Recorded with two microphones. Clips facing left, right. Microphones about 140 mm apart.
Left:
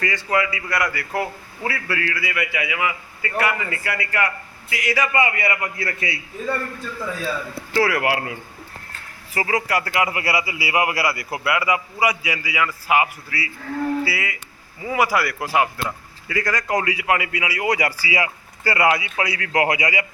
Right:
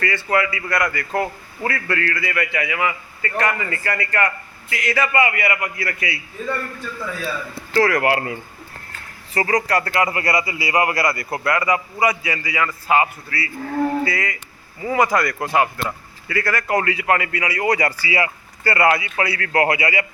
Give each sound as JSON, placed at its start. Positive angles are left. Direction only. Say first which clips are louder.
{"t": 0.0, "sound": "a man's voice", "louder": "right 2 dB", "side_deg": 15}
{"t": 7.7, "sound": "a man's voice", "louder": "right 3 dB", "side_deg": 10}